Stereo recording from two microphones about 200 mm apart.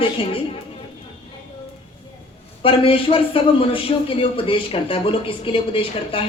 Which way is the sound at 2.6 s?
25° left (ahead or behind).